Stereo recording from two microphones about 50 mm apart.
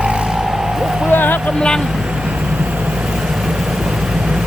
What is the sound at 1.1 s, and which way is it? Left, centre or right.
Boat, left.